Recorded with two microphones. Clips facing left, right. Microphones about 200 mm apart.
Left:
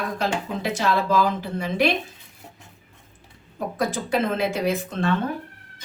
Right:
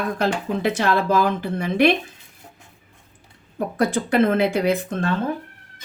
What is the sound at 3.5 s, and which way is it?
A woman's voice, 60° right (ahead or behind).